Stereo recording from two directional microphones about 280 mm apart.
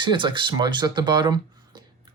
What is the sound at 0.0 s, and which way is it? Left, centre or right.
Speech, centre.